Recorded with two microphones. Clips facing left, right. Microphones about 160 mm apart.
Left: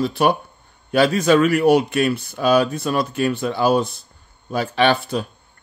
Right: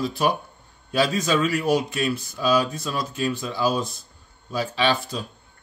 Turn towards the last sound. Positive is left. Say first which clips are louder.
# left 5 dB
turn(degrees=65)  # may be behind; listen again after turning